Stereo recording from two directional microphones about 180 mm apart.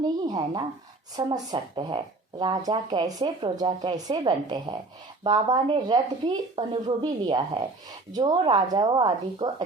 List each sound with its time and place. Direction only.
0.3 s speech: 25° right (ahead or behind)